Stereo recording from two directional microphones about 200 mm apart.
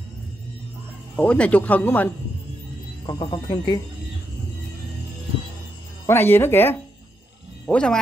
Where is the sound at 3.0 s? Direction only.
25° left (ahead or behind).